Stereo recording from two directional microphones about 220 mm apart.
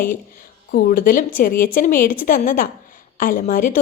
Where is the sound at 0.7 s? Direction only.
40° left (ahead or behind).